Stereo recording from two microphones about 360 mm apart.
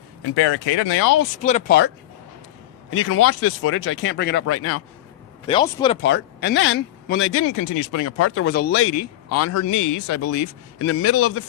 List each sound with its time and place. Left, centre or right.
0.3 s speech: left
1.4 s speech: centre
2.9 s speech: left
5.5 s speech: centre
6.0 s speech: left